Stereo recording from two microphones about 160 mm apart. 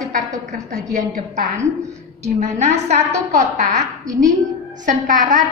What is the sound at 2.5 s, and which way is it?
A woman's voice, 45° right (ahead or behind).